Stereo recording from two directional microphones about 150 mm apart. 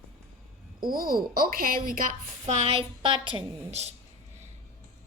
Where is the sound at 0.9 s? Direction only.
75° right (ahead or behind).